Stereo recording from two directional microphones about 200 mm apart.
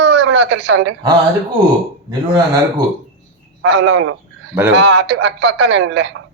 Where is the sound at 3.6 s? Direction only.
70° right (ahead or behind).